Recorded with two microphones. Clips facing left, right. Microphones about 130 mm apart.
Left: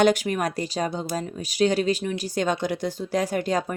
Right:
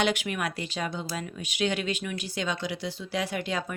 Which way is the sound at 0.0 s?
40° left (ahead or behind).